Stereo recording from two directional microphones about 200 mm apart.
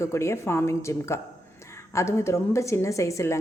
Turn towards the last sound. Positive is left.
turn(degrees=15)  # may be behind; listen again after turning